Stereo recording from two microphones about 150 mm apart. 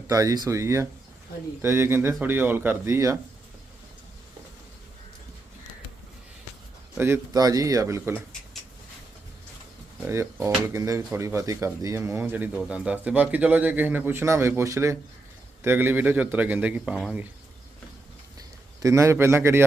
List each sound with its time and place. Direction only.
0.1 s a man's voice: 25° right (ahead or behind)
6.9 s a man's voice: 15° right (ahead or behind)
10.1 s speech: 20° right (ahead or behind)
18.3 s a man's voice: 20° right (ahead or behind)